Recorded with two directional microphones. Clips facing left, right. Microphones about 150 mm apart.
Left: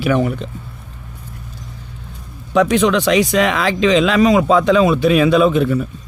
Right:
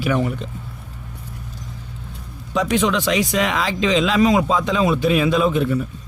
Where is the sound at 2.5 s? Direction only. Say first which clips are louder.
Left 5 dB; 70° left (ahead or behind).